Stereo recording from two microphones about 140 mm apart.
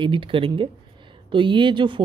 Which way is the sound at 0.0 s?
40° right (ahead or behind).